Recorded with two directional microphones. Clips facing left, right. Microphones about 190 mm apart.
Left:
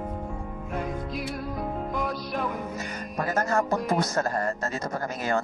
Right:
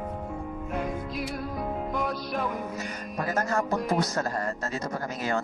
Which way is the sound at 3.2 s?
50° left (ahead or behind).